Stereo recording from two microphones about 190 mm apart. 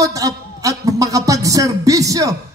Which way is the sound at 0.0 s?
20° right (ahead or behind).